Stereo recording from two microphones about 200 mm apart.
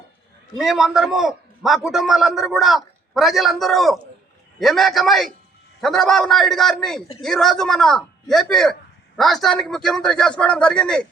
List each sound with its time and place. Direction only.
0.6 s a man's voice: centre (ahead or behind)